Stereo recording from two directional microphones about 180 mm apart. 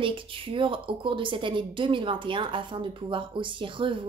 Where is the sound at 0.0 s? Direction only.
30° right (ahead or behind).